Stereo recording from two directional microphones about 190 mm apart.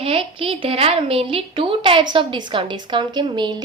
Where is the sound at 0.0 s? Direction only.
30° right (ahead or behind).